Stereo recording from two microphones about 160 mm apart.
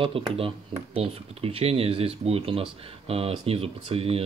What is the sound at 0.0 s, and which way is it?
Speech, 35° right (ahead or behind).